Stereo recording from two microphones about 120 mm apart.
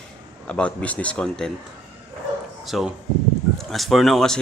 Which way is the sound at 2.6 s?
Centre (ahead or behind).